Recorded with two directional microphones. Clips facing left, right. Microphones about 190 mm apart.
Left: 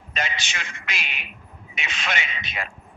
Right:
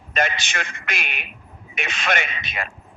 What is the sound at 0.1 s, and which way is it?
A man's voice, 55° right (ahead or behind).